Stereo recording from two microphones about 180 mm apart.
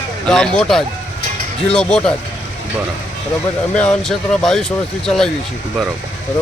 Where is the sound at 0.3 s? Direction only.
5° left (ahead or behind).